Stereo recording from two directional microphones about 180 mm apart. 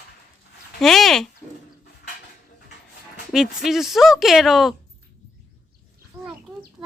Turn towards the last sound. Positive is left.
turn(degrees=-10)  # may be behind; listen again after turning